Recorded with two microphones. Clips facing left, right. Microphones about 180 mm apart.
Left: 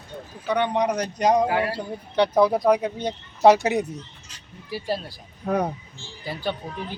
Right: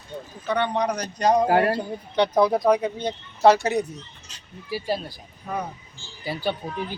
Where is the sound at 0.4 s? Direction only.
15° left (ahead or behind).